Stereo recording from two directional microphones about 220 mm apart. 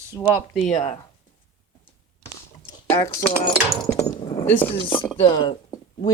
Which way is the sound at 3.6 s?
15° left (ahead or behind).